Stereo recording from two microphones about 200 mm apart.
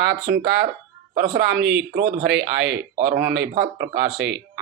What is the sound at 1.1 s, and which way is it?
Speech, 45° right (ahead or behind).